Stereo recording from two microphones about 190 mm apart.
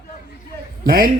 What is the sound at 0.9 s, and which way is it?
Speech, 50° right (ahead or behind).